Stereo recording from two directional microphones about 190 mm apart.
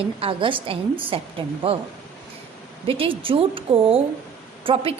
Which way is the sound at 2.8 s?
30° right (ahead or behind).